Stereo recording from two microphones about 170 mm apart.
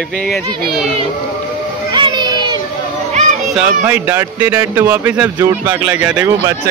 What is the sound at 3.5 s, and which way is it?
Speech, 10° right (ahead or behind).